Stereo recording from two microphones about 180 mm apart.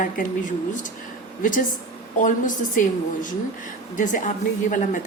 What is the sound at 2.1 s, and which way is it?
Speech, 45° left (ahead or behind).